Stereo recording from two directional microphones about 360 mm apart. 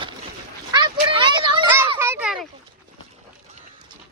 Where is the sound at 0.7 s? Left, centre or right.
Centre.